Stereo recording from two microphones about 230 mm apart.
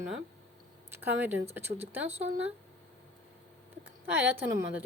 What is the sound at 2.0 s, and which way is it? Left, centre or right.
Speech, right.